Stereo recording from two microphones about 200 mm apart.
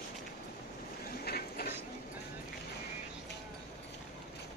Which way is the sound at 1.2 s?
50° left (ahead or behind).